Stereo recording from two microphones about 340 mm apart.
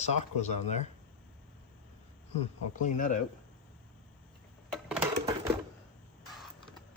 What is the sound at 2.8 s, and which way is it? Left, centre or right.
Speech, left.